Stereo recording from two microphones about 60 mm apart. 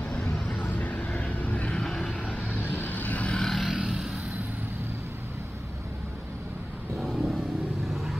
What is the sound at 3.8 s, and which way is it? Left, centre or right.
Vehicle, centre.